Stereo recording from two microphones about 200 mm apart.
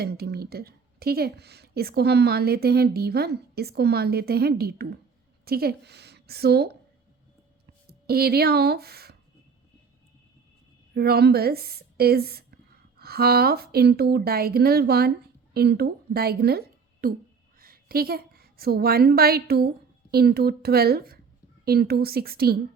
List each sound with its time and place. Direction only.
0.0 s a woman's voice: 50° right (ahead or behind)
7.9 s speech: 50° right (ahead or behind)
10.9 s a woman's voice: 50° right (ahead or behind)